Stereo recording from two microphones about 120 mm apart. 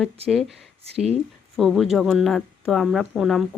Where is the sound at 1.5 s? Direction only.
Centre (ahead or behind).